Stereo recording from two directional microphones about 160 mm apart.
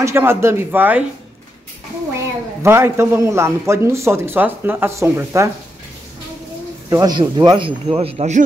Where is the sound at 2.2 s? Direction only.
15° right (ahead or behind).